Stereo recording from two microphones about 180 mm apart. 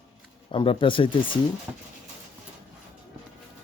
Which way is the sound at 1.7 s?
15° right (ahead or behind).